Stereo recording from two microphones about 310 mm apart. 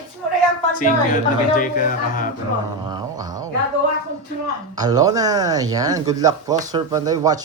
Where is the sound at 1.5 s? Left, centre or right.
Left.